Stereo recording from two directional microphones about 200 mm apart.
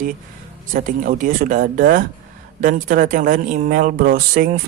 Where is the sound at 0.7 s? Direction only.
40° right (ahead or behind).